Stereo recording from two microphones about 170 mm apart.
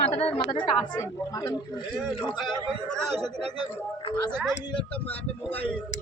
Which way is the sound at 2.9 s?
5° left (ahead or behind).